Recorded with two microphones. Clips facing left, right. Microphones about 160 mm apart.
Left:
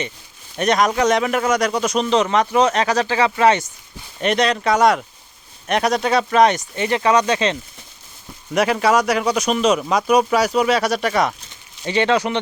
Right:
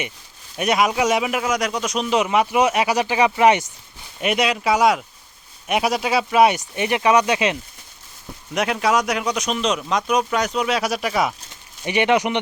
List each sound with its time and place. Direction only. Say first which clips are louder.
0.5 s a man's voice: left 2 dB; 5° right (ahead or behind)
8.5 s speech: left 3 dB; centre (ahead or behind)
11.8 s a man's voice: even; 15° right (ahead or behind)